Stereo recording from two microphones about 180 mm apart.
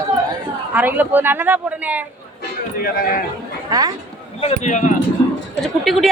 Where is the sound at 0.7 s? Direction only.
10° right (ahead or behind).